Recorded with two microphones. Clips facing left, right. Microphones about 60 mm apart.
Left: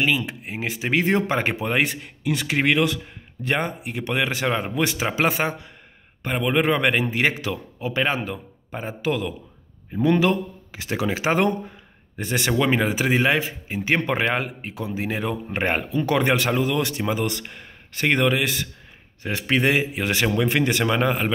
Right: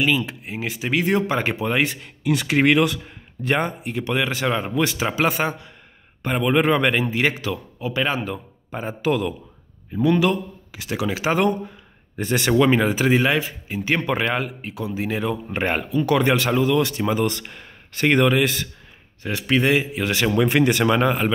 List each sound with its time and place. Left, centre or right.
0.0 s speech: centre
2.2 s a man's voice: centre
3.9 s a man's voice: centre
6.2 s a man's voice: centre
7.0 s speech: left
8.3 s a man's voice: centre
10.0 s speech: left
12.2 s speech: centre
17.0 s a man's voice: centre
19.3 s speech: left
20.4 s a man's voice: centre